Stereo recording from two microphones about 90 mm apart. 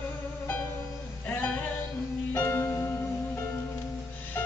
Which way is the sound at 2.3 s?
30° left (ahead or behind).